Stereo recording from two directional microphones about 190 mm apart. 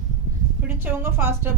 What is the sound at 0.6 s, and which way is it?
Speech, 10° right (ahead or behind).